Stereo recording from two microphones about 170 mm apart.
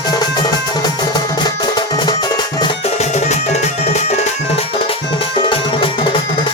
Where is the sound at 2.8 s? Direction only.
40° left (ahead or behind).